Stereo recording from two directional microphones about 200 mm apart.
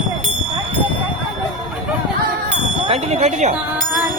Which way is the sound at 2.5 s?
30° right (ahead or behind).